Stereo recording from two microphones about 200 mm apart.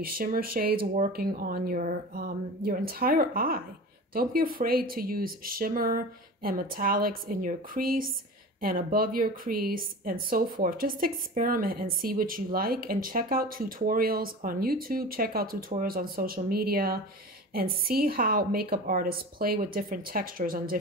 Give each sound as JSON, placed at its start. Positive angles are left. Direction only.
{"t": 0.0, "sound": "a woman's voice", "side_deg": -45}